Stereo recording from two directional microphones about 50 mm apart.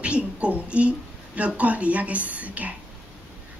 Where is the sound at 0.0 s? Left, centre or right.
Right.